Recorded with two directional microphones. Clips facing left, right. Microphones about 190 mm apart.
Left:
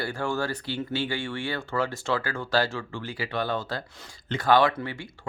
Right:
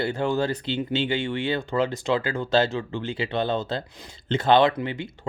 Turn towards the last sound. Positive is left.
turn(degrees=-20)  # may be behind; listen again after turning